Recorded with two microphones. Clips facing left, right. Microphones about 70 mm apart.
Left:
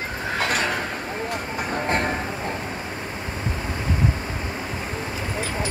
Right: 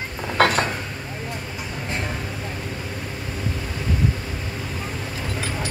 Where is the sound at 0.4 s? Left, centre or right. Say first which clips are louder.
Right 8 dB; right.